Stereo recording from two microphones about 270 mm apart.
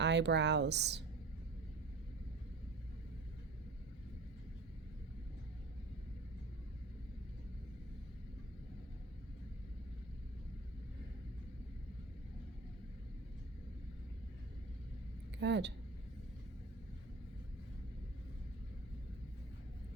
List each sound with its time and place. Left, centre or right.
0.0 s speech: right
15.4 s speech: right